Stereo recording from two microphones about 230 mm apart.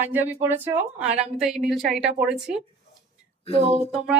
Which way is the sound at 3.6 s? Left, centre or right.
Right.